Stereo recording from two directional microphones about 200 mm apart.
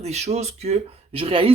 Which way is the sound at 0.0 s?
35° right (ahead or behind).